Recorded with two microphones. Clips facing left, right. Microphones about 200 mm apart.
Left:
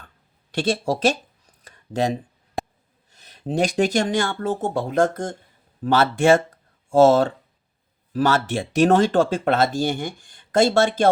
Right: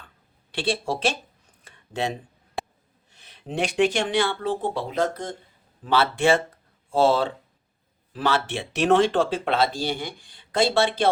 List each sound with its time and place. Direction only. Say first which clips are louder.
0.5 s speech: left 4 dB; 45° left (ahead or behind)
1.6 s a sound: left 5 dB; 40° left (ahead or behind)
2.6 s snort: left 3 dB; 40° left (ahead or behind)
3.1 s speech: left 7 dB; 40° left (ahead or behind)